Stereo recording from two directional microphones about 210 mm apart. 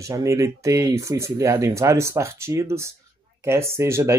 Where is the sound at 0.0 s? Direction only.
15° right (ahead or behind).